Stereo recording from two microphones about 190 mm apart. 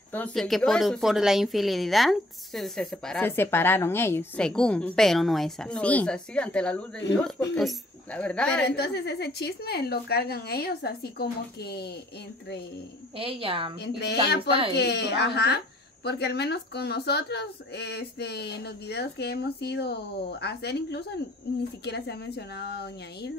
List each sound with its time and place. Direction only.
0.1 s speech: 5° left (ahead or behind)
8.6 s a woman's voice: 60° left (ahead or behind)
13.2 s a woman's voice: 30° right (ahead or behind)
13.7 s a woman's voice: 60° left (ahead or behind)
14.5 s a woman's voice: 30° right (ahead or behind)
14.8 s a woman's voice: 60° left (ahead or behind)